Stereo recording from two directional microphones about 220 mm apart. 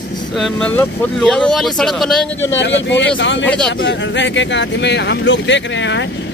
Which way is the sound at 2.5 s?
55° left (ahead or behind).